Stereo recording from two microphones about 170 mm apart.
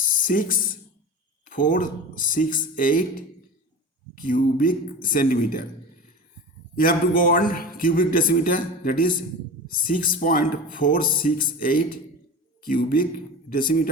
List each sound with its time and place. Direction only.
0.0 s a sound: 55° left (ahead or behind)
1.5 s speech: 50° left (ahead or behind)
6.7 s a man's voice: 55° left (ahead or behind)